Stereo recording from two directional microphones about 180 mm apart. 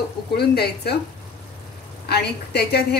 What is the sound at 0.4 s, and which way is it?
Speech, 60° left (ahead or behind).